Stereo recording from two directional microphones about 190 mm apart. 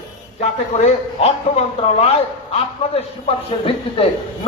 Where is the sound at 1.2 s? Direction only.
35° left (ahead or behind).